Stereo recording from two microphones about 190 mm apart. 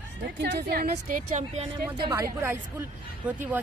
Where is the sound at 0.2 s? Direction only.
65° right (ahead or behind); by 1.7 s 35° right (ahead or behind).